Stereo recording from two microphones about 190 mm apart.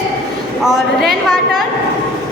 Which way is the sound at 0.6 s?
Centre (ahead or behind).